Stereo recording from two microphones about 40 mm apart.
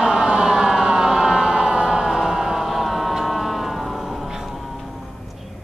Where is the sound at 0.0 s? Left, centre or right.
Centre.